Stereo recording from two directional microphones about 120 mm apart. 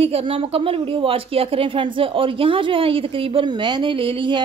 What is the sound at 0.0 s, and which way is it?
Speech, 55° right (ahead or behind).